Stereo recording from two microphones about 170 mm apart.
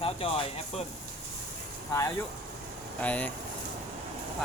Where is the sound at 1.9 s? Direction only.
20° left (ahead or behind).